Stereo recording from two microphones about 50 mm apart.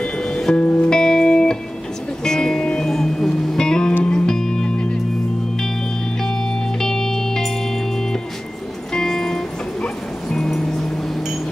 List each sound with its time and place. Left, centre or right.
0.0 s music: centre
0.6 s music: left
6.2 s music: centre